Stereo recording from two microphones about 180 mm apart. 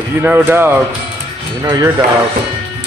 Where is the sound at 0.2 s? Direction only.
10° right (ahead or behind).